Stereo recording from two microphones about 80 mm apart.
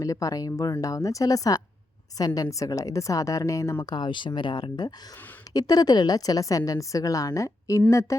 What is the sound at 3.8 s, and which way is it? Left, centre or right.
Speech, left.